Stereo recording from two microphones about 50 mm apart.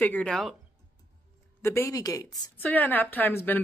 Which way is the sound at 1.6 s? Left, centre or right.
Left.